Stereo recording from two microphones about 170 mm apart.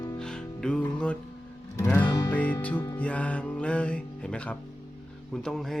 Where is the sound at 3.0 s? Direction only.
10° left (ahead or behind).